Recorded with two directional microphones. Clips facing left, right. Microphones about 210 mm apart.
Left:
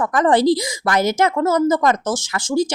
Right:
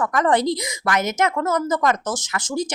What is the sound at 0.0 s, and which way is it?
A woman's voice, 30° left (ahead or behind).